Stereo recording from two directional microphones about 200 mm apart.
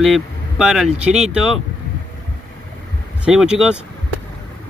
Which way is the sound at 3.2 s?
5° right (ahead or behind).